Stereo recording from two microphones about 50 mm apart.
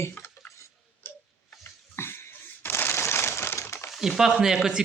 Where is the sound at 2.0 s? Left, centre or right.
Left.